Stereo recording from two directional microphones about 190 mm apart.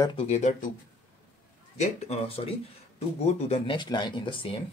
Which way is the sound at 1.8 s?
35° left (ahead or behind).